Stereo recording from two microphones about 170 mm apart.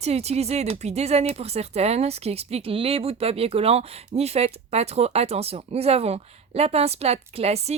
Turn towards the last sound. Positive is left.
turn(degrees=-40)  # may be behind; listen again after turning